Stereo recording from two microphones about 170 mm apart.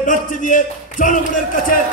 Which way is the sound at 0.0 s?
50° left (ahead or behind).